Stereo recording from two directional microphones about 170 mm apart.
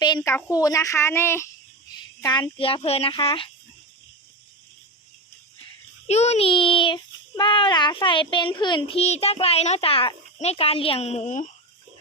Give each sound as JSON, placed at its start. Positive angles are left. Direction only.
{"t": 0.3, "sound": "a woman's voice", "side_deg": 20}
{"t": 1.9, "sound": "a sound", "side_deg": 25}
{"t": 2.6, "sound": "a child's voice", "side_deg": 35}
{"t": 6.1, "sound": "a child's voice", "side_deg": 40}